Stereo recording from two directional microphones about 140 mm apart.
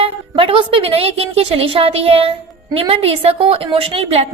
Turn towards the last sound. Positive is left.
turn(degrees=-45)  # may be behind; listen again after turning